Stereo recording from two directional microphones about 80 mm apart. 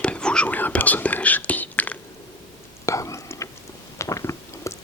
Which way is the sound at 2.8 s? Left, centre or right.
Left.